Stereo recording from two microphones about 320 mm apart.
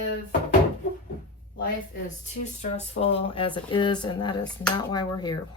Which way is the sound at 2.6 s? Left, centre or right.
Left.